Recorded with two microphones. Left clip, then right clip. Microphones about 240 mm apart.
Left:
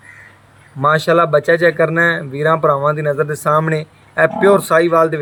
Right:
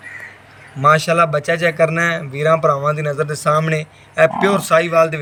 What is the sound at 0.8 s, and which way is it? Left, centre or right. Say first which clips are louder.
Speech: even; left.